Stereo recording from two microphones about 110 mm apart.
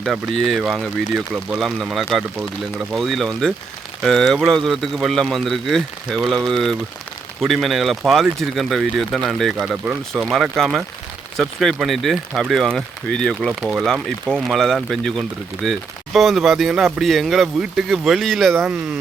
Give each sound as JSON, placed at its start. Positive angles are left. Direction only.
{"t": 0.0, "sound": "speech", "side_deg": 0}